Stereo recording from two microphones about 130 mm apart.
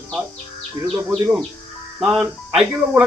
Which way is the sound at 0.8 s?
25° right (ahead or behind).